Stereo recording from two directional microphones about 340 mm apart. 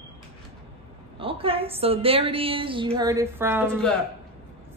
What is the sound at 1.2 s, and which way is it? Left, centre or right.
A woman's voice, centre.